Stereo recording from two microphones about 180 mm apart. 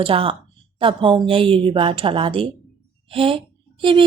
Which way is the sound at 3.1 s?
30° right (ahead or behind).